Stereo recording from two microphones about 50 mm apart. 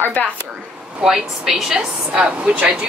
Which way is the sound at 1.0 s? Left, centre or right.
Centre.